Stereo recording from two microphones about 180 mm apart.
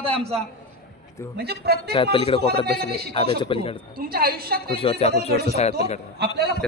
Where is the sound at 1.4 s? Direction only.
65° right (ahead or behind).